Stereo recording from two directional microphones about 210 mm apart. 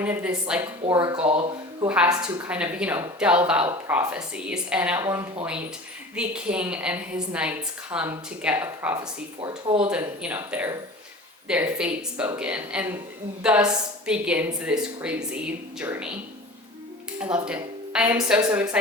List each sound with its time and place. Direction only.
0.0 s a woman's voice: 5° right (ahead or behind)
0.9 s a woman's voice: 15° right (ahead or behind)
2.2 s speech: 5° right (ahead or behind)
9.4 s speech: 25° right (ahead or behind)
9.9 s a woman's voice: 5° right (ahead or behind)
17.3 s a woman's voice: 5° right (ahead or behind)